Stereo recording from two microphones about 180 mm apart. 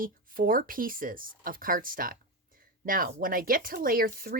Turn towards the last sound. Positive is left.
turn(degrees=-55)  # may be behind; listen again after turning